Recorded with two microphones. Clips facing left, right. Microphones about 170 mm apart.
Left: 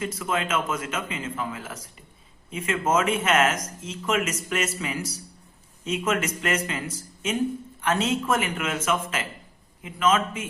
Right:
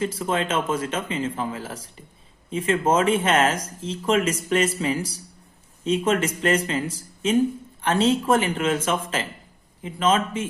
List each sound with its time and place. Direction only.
0.0 s speech: 30° right (ahead or behind)